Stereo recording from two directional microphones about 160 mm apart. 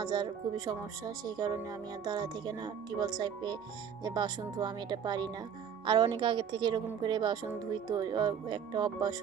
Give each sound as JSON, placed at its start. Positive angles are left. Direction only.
{"t": 0.0, "sound": "a woman's voice", "side_deg": -25}